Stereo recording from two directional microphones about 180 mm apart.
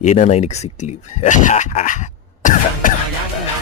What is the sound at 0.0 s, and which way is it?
Speech, 40° left (ahead or behind).